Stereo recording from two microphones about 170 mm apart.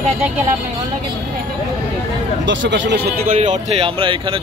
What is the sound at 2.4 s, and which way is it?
Speech, 90° right.